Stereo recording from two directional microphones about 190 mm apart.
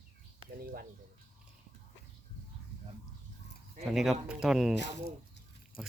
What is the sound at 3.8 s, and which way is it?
Speech, centre (ahead or behind).